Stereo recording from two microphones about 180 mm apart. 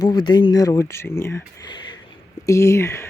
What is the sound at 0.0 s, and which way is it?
Speech, 25° left (ahead or behind).